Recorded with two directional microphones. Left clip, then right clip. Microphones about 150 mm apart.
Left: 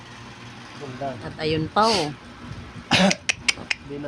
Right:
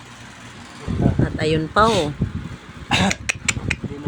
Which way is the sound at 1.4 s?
25° right (ahead or behind).